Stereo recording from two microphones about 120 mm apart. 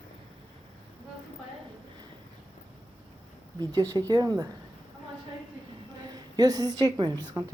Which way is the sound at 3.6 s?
30° right (ahead or behind).